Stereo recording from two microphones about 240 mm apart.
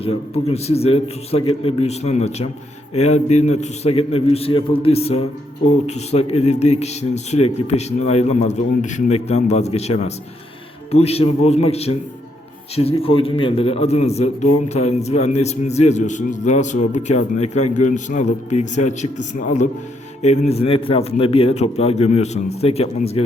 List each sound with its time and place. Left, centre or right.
0.0 s a man's voice: left